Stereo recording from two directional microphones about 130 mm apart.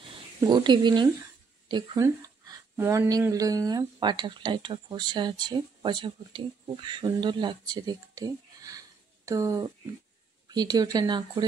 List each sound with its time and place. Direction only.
0.4 s speech: 35° right (ahead or behind)
2.7 s speech: 20° right (ahead or behind); by 11.4 s 35° right (ahead or behind)